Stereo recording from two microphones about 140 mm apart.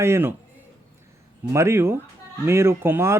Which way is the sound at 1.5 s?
20° right (ahead or behind).